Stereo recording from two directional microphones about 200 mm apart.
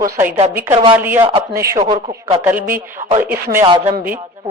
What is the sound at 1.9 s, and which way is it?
Speech, 25° right (ahead or behind).